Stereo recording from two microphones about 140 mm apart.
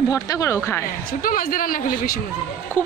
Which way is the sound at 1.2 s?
90° left.